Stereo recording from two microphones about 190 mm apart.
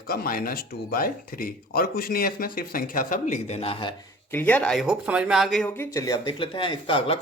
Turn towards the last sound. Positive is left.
turn(degrees=30)  # may be behind; listen again after turning